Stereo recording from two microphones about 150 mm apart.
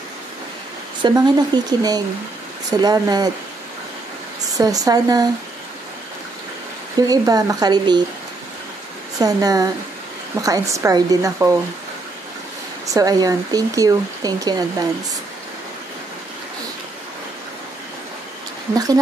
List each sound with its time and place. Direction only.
1.0 s speech: 30° right (ahead or behind)
4.6 s speech: 25° right (ahead or behind)
7.0 s speech: 25° right (ahead or behind)
9.2 s speech: 25° right (ahead or behind)
12.8 s speech: 25° right (ahead or behind)